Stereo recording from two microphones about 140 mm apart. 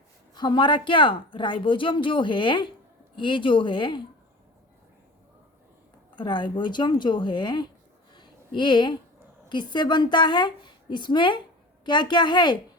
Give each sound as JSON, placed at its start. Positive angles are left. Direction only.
{"t": 0.3, "sound": "a woman's voice", "side_deg": 35}
{"t": 6.1, "sound": "a woman's voice", "side_deg": 35}
{"t": 8.1, "sound": "a sound", "side_deg": 35}
{"t": 9.5, "sound": "a woman's voice", "side_deg": 30}